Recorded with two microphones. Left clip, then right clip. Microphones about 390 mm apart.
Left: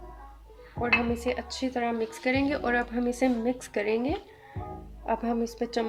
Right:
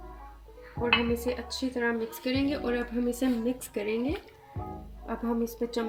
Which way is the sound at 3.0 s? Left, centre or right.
Centre.